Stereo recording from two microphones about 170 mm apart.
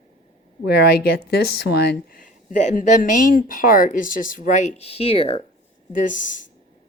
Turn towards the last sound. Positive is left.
turn(degrees=50)  # may be behind; listen again after turning